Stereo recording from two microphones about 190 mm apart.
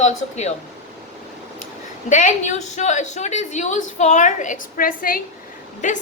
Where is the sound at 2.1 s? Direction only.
40° left (ahead or behind).